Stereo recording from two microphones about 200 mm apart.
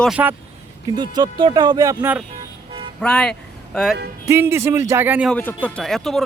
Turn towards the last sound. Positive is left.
turn(degrees=0)  # may be behind; listen again after turning